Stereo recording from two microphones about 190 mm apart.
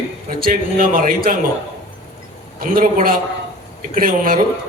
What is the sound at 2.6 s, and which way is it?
A man's voice, 50° right (ahead or behind).